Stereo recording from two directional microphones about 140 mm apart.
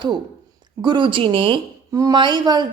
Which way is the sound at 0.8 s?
35° right (ahead or behind).